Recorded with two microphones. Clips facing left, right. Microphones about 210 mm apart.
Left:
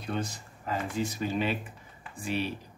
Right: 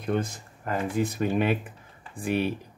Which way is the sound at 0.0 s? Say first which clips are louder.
Right 6 dB; 50° right (ahead or behind).